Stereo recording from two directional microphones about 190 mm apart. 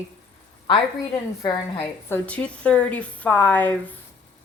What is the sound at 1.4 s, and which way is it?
Speech, 25° left (ahead or behind).